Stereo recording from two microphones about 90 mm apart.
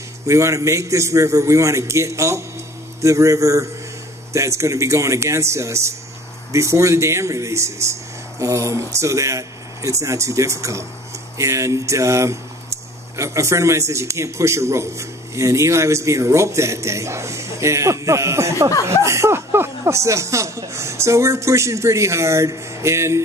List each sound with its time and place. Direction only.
0.3 s a man's voice: 35° right (ahead or behind)